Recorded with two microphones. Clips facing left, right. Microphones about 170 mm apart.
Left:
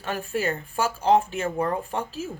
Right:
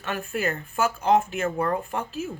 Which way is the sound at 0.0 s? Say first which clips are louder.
Left 1 dB; 35° left (ahead or behind).